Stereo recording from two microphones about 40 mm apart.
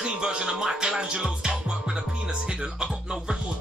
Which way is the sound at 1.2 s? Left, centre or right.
Centre.